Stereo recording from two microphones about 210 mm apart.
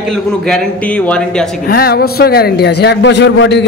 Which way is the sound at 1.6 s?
45° left (ahead or behind).